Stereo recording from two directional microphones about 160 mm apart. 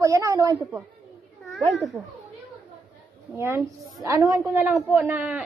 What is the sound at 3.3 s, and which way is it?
Speech, 15° right (ahead or behind).